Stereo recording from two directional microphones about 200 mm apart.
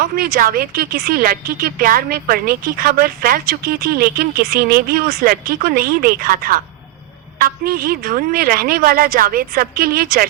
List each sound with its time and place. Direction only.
0.0 s a woman's voice: 50° right (ahead or behind)